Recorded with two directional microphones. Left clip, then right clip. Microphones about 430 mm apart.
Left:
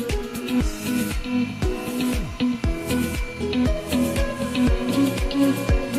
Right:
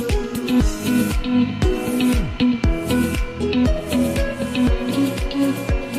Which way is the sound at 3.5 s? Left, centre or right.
Right.